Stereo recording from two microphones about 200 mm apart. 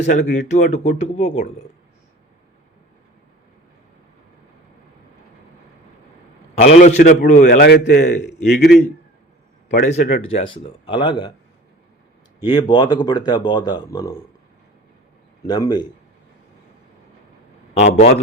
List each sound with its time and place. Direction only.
0.0 s speech: 40° left (ahead or behind)
6.6 s a man's voice: 35° left (ahead or behind); by 8.3 s 55° left (ahead or behind)
9.8 s speech: 40° left (ahead or behind)
10.3 s speech: 25° left (ahead or behind)
12.5 s speech: 20° left (ahead or behind)
15.4 s speech: 20° left (ahead or behind)
17.7 s speech: 35° left (ahead or behind)